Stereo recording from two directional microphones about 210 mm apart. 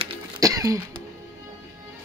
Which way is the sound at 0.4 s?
15° right (ahead or behind).